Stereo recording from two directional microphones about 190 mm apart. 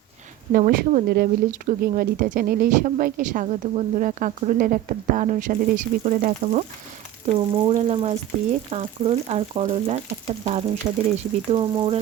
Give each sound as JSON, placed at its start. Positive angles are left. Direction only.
{"t": 0.5, "sound": "speech", "side_deg": -45}
{"t": 7.7, "sound": "frying", "side_deg": -35}
{"t": 10.8, "sound": "speech", "side_deg": -25}
{"t": 11.2, "sound": "frying", "side_deg": -30}